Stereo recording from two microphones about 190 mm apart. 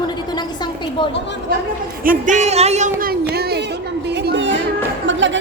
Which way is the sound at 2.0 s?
45° right (ahead or behind).